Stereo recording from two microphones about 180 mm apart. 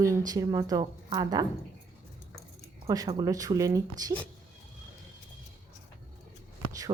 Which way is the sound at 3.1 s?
20° right (ahead or behind).